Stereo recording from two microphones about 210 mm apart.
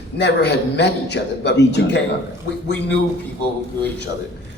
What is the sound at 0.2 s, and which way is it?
Speech, 55° left (ahead or behind).